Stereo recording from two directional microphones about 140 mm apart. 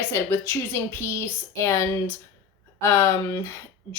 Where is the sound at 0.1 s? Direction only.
20° left (ahead or behind).